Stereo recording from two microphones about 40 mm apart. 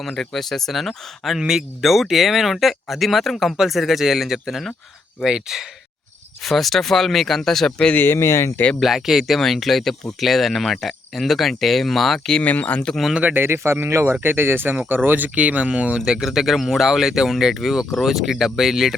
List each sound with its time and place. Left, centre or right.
0.1 s speech: centre
1.4 s speech: centre
6.4 s speech: centre
7.9 s speech: left
8.8 s speech: centre
12.4 s speech: left
13.3 s a man's voice: right
15.4 s speech: right
16.0 s speech: centre